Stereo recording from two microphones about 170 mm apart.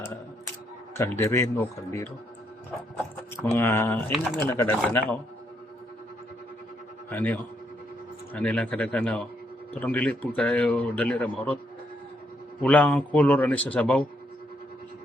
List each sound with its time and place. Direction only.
0.9 s speech: 15° left (ahead or behind)
3.4 s speech: 15° left (ahead or behind)
4.1 s speech: centre (ahead or behind)
4.4 s speech: 15° left (ahead or behind)
7.1 s speech: 10° left (ahead or behind)
12.6 s speech: 10° left (ahead or behind)